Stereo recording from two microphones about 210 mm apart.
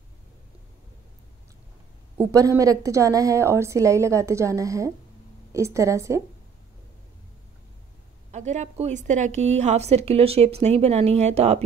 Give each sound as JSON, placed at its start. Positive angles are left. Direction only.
{"t": 2.1, "sound": "a woman's voice", "side_deg": -15}
{"t": 8.3, "sound": "a woman's voice", "side_deg": -35}